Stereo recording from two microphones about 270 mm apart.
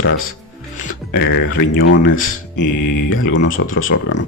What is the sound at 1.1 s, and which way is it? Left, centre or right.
Speech, left.